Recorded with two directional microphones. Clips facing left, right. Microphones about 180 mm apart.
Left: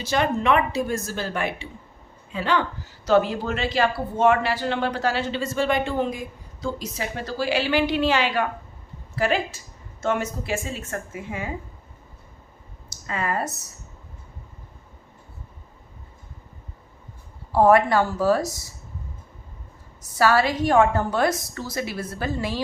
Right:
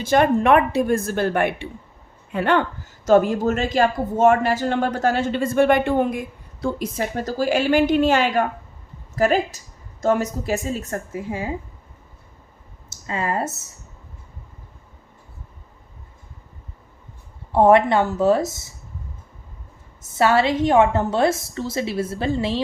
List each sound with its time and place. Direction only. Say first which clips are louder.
0.0 s a woman's voice: right 6 dB; 50° right (ahead or behind); by 11.5 s 30° right (ahead or behind)
12.9 s speech: right 2 dB; 25° right (ahead or behind)
17.5 s a woman's voice: right 2 dB; 25° right (ahead or behind)
20.0 s a woman's voice: right 2 dB; 25° right (ahead or behind)